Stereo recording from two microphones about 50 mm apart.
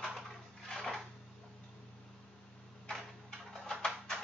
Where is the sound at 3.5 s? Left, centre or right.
Centre.